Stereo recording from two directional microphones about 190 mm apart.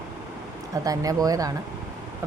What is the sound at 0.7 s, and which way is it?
Speech, 20° right (ahead or behind).